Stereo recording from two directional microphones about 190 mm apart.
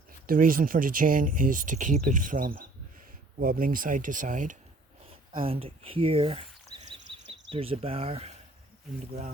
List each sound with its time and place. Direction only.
0.3 s speech: 45° right (ahead or behind)
5.0 s speech: 30° right (ahead or behind)
6.7 s a sound: 30° right (ahead or behind)
7.5 s speech: 30° right (ahead or behind)